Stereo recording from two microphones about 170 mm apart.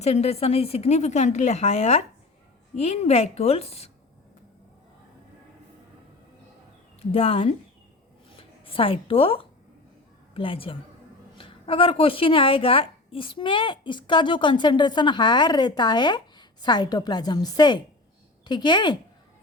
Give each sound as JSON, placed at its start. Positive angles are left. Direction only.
{"t": 0.0, "sound": "speech", "side_deg": 40}
{"t": 7.0, "sound": "a woman's voice", "side_deg": 35}